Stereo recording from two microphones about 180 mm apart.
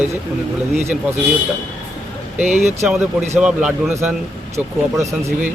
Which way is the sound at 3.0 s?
10° right (ahead or behind).